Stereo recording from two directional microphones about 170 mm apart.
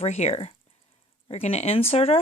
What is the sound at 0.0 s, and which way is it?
Speech, 40° left (ahead or behind).